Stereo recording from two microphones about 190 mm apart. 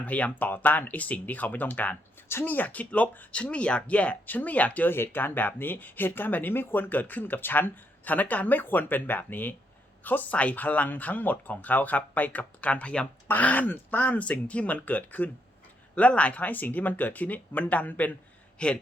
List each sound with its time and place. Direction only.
0.0 s a man's voice: 10° left (ahead or behind)